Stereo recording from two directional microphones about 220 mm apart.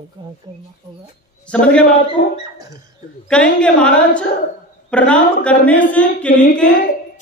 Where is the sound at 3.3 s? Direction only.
5° left (ahead or behind).